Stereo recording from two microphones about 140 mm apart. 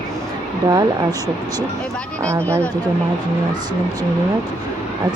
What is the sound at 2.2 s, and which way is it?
Speech, 20° right (ahead or behind).